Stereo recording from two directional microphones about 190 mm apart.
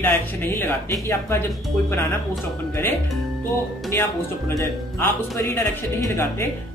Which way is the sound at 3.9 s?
15° left (ahead or behind).